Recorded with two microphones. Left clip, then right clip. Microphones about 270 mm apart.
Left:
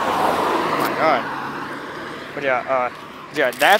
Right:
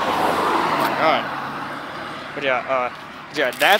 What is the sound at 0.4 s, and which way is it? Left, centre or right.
Vehicle, centre.